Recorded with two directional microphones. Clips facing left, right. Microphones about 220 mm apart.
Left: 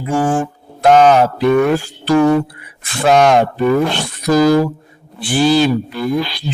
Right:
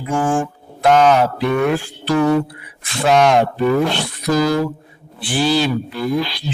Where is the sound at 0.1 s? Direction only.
30° left (ahead or behind); by 3.3 s 50° left (ahead or behind).